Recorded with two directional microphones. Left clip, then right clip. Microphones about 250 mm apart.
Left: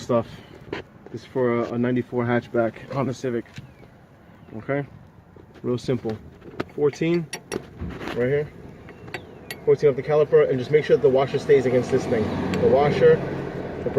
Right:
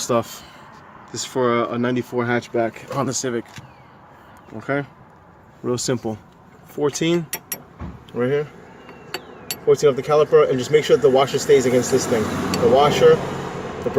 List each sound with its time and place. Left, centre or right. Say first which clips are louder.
0.1 s speech: right 2 dB; right
1.3 s speech: right 3 dB; right
4.6 s speech: right 3 dB; right
9.6 s speech: right 3 dB; right
11.1 s speech: right 4 dB; right
11.4 s speech: right 3 dB; right